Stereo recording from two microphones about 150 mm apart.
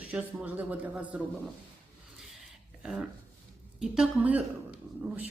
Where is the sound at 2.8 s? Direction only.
5° right (ahead or behind).